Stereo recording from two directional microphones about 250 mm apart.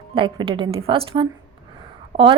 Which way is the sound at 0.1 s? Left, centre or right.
Right.